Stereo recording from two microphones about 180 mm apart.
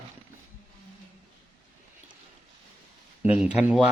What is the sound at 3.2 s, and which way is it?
Speech, 10° right (ahead or behind).